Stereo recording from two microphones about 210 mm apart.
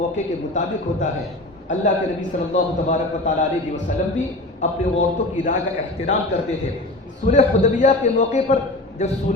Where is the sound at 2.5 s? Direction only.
35° left (ahead or behind).